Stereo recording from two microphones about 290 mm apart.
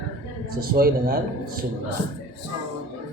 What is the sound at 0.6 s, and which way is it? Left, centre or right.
Speech, right.